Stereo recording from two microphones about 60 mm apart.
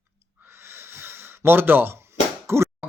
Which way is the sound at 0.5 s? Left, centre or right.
Right.